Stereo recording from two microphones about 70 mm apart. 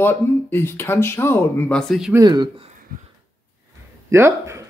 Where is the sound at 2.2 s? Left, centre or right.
Right.